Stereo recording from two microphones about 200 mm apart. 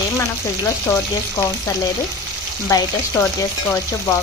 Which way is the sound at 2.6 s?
15° left (ahead or behind).